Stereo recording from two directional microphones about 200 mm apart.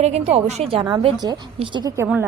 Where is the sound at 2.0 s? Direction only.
10° right (ahead or behind).